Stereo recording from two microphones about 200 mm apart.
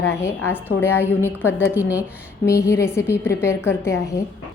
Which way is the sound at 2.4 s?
15° left (ahead or behind).